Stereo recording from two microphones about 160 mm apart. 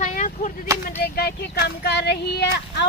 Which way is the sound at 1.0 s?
75° left (ahead or behind).